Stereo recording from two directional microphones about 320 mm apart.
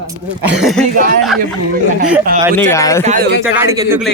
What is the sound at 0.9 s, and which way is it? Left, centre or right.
Speech, right.